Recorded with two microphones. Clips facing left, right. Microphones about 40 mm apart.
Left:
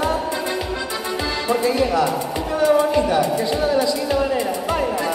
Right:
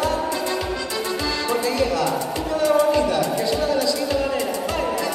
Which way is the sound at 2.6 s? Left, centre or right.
Left.